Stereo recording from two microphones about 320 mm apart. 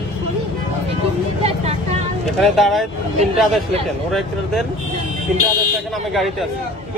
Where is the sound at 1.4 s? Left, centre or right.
Centre.